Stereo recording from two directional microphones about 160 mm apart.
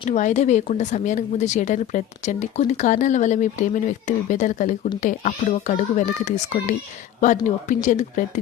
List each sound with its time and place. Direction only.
0.1 s speech: 50° left (ahead or behind)